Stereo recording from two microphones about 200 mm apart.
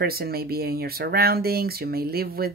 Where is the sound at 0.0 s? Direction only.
50° right (ahead or behind).